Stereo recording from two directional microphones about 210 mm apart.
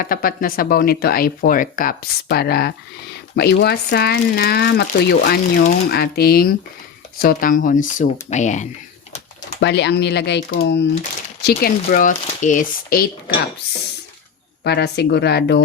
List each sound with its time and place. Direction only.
0.0 s speech: 45° left (ahead or behind)
9.6 s speech: 55° left (ahead or behind); by 13.1 s 40° left (ahead or behind)
14.6 s speech: 50° left (ahead or behind)